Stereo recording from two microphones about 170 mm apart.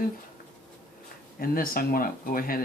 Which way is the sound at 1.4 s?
60° left (ahead or behind).